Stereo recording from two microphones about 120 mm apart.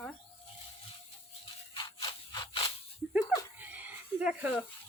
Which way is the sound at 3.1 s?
15° right (ahead or behind).